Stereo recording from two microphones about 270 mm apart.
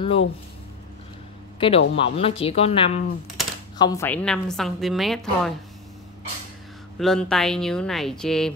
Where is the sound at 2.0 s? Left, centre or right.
Left; by 5.5 s centre.